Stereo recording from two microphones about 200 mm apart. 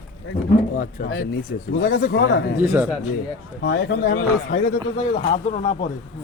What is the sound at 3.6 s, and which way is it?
Speech, 65° left (ahead or behind).